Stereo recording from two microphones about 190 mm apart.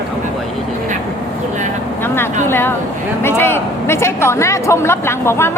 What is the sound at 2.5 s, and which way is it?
A man's voice, 10° left (ahead or behind).